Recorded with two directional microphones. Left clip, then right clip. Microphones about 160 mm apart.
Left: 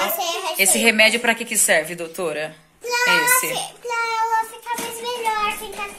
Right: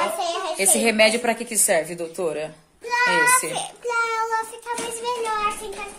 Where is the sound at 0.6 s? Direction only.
10° right (ahead or behind).